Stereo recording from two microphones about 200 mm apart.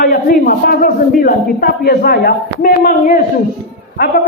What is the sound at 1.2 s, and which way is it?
A man's voice, 50° left (ahead or behind).